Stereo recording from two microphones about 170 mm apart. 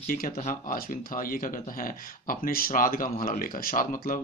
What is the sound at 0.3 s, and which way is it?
Speech, 40° left (ahead or behind).